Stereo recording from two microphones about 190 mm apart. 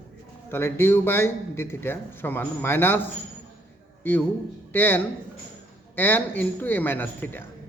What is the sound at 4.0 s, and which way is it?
A man's voice, 10° left (ahead or behind).